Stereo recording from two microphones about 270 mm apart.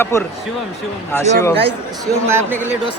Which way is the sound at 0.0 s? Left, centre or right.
Centre.